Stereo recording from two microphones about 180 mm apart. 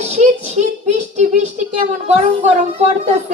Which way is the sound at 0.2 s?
40° right (ahead or behind).